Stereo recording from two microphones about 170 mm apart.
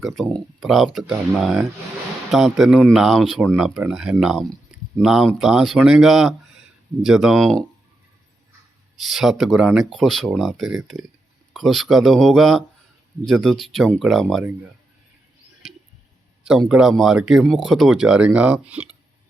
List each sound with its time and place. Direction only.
0.2 s speech: centre (ahead or behind)
9.0 s speech: centre (ahead or behind)
16.4 s speech: 5° right (ahead or behind)